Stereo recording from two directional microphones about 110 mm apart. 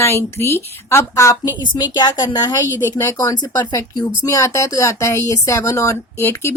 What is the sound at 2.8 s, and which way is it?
Speech, 30° left (ahead or behind).